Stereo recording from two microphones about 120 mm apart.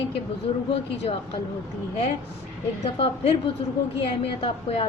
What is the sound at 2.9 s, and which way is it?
A woman's voice, 55° left (ahead or behind).